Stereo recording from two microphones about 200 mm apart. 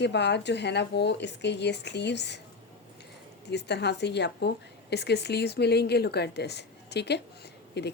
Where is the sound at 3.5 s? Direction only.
60° left (ahead or behind).